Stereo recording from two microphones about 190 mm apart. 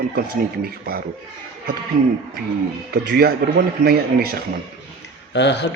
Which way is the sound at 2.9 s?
55° right (ahead or behind).